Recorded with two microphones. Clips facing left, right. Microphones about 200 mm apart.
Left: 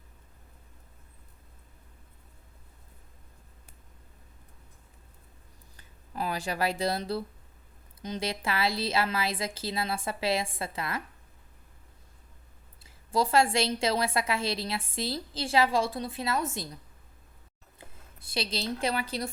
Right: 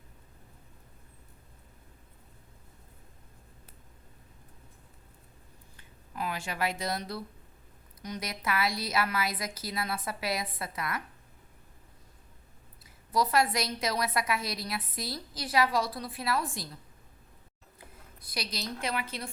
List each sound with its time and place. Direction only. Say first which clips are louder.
5.7 s a sound: left 3 dB; 35° left (ahead or behind)
8.0 s a woman's voice: left 3 dB; 25° left (ahead or behind)
12.8 s a woman's voice: left 1 dB; 25° left (ahead or behind)
17.7 s speech: even; 25° left (ahead or behind)